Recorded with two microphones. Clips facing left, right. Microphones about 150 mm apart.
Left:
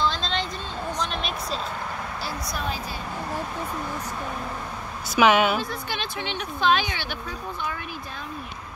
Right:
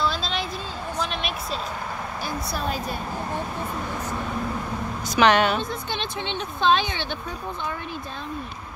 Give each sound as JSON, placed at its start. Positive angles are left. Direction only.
{"t": 0.0, "sound": "a sound", "side_deg": -5}
{"t": 5.1, "sound": "a woman's voice", "side_deg": 5}
{"t": 5.6, "sound": "a woman's voice", "side_deg": -25}